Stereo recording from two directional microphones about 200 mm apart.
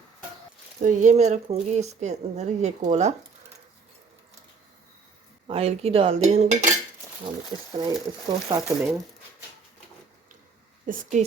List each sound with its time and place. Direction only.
0.8 s speech: 40° right (ahead or behind)
5.5 s speech: 30° right (ahead or behind)
7.8 s speech: 20° right (ahead or behind)
8.8 s speech: 10° right (ahead or behind)
10.8 s speech: 40° right (ahead or behind)